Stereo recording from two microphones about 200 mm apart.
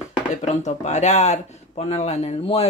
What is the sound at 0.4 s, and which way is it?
Speech, 35° left (ahead or behind).